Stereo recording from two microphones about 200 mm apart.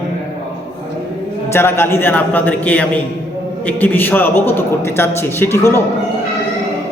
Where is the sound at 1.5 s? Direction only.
10° left (ahead or behind).